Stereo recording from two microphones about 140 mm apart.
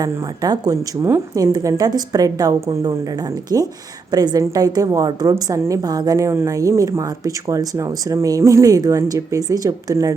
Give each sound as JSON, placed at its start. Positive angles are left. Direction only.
{"t": 0.0, "sound": "a woman's voice", "side_deg": -25}